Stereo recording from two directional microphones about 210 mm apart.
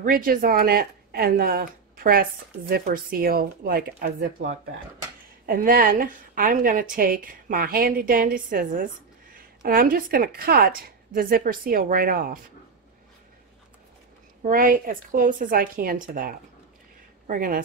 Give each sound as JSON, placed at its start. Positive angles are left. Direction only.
{"t": 0.0, "sound": "a woman's voice", "side_deg": -45}
{"t": 5.5, "sound": "a woman's voice", "side_deg": -40}
{"t": 14.4, "sound": "a woman's voice", "side_deg": -40}